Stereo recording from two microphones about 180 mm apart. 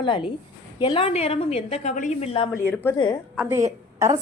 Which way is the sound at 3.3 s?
10° right (ahead or behind).